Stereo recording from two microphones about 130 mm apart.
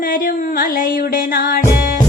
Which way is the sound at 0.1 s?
90° left.